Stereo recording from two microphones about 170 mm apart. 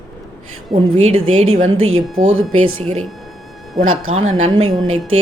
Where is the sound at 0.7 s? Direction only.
35° right (ahead or behind).